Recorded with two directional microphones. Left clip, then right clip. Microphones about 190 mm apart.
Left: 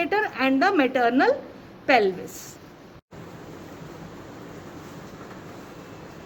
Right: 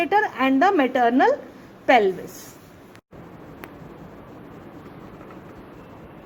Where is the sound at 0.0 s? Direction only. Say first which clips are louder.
Right 3 dB; 40° right (ahead or behind).